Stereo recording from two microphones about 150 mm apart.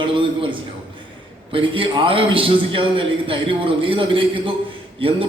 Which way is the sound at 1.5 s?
35° right (ahead or behind).